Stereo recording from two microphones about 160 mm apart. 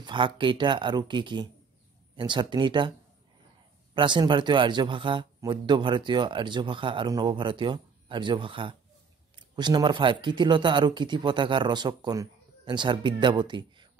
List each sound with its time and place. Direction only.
0.0 s a man's voice: 30° right (ahead or behind)
3.9 s a man's voice: 30° right (ahead or behind)